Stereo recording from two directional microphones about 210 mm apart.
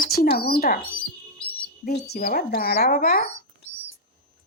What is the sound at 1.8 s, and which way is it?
Speech, 50° left (ahead or behind).